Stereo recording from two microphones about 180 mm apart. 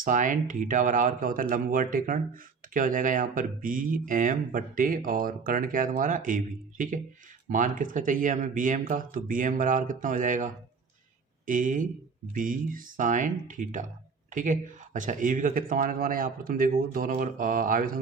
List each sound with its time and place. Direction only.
0.0 s speech: 45° right (ahead or behind)